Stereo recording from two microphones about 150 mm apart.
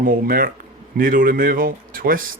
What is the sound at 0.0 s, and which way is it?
Speech, 70° right (ahead or behind).